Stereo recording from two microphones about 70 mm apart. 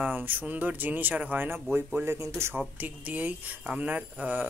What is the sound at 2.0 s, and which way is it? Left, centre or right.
Speech, right.